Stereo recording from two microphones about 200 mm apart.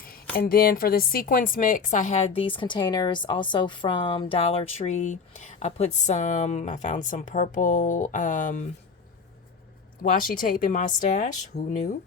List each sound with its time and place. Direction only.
0.3 s a woman's voice: 50° left (ahead or behind)
10.0 s a woman's voice: 45° left (ahead or behind)